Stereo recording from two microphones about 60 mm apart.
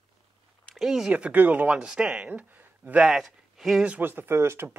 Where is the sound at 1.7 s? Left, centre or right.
Centre.